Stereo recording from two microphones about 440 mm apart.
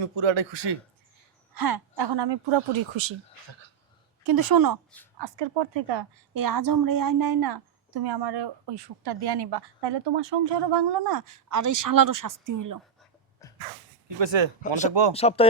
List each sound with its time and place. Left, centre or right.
0.2 s speech: right
1.5 s speech: right
4.3 s a woman's voice: right
5.1 s speech: right
6.3 s a woman's voice: right
13.4 s sneeze: centre
14.2 s speech: right
15.1 s speech: centre